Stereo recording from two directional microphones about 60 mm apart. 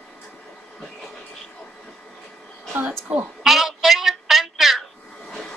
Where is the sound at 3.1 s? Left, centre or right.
Right.